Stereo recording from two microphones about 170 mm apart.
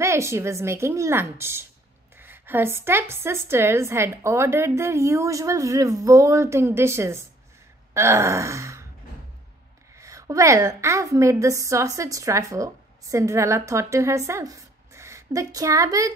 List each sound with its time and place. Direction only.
0.0 s speech: 15° right (ahead or behind)
7.9 s gasp: 15° right (ahead or behind)
9.9 s a woman's voice: 20° right (ahead or behind)